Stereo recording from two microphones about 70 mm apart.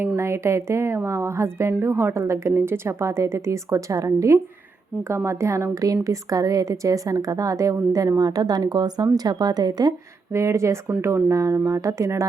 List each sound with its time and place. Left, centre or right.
0.2 s a woman's voice: right
10.3 s a woman's voice: right